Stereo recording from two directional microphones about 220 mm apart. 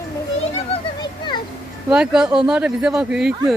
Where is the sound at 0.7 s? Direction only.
20° left (ahead or behind).